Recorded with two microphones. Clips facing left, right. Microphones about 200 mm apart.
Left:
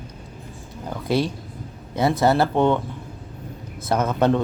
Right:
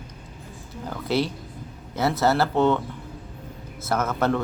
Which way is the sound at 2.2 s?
15° left (ahead or behind).